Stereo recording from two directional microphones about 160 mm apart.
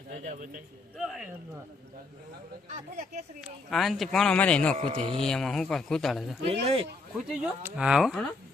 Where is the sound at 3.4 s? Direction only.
5° right (ahead or behind).